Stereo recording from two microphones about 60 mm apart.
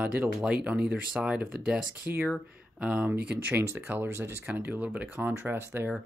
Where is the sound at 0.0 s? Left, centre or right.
Right.